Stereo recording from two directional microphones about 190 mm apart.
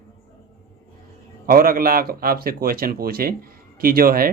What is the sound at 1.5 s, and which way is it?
Speech, 50° right (ahead or behind).